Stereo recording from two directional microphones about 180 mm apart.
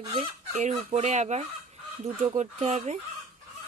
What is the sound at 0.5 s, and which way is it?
Speech, 40° right (ahead or behind).